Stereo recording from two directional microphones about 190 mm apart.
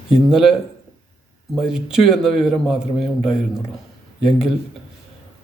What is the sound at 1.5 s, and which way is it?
A man's voice, 5° right (ahead or behind).